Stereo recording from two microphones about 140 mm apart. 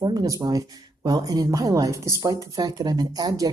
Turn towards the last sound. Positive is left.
turn(degrees=-25)  # may be behind; listen again after turning